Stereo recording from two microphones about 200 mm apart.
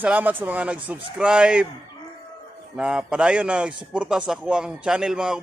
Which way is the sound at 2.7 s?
5° right (ahead or behind).